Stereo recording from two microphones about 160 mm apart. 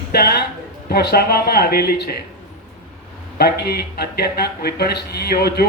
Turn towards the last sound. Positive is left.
turn(degrees=75)  # may be behind; listen again after turning